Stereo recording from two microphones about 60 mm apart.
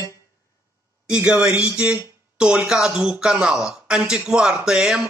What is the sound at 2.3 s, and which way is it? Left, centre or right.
Music, centre.